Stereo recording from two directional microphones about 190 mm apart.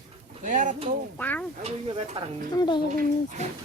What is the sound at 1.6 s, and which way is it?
Speech, 25° right (ahead or behind).